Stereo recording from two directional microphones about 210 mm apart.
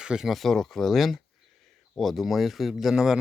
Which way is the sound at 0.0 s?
5° right (ahead or behind).